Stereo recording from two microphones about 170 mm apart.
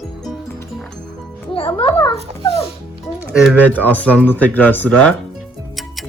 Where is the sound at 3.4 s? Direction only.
Centre (ahead or behind).